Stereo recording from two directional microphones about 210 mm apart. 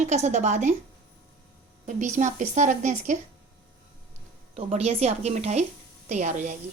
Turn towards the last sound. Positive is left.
turn(degrees=-35)  # may be behind; listen again after turning